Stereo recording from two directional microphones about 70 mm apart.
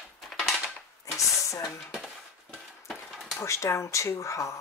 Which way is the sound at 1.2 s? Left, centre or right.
Left.